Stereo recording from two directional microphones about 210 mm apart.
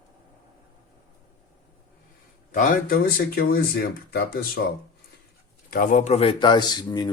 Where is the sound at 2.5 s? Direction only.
40° left (ahead or behind).